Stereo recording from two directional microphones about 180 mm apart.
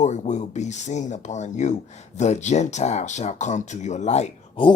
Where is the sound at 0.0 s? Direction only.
40° left (ahead or behind).